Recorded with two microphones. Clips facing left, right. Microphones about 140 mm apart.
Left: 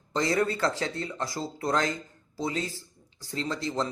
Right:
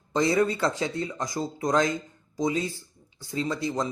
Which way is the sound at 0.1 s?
15° right (ahead or behind).